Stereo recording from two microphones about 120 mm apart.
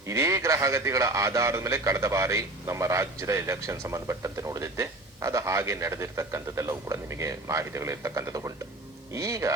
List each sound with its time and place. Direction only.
0.0 s a man's voice: 25° right (ahead or behind)